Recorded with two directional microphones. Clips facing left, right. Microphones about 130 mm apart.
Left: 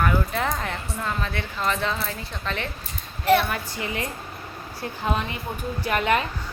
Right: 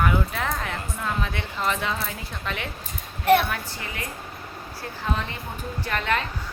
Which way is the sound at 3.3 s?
50° right (ahead or behind).